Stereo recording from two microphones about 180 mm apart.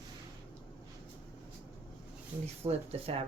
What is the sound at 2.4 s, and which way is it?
Speech, 35° right (ahead or behind).